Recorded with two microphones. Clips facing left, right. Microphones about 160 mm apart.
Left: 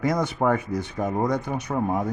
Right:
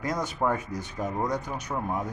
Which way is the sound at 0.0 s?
70° left (ahead or behind).